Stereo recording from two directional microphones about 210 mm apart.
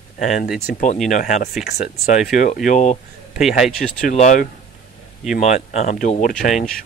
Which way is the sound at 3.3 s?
Centre (ahead or behind).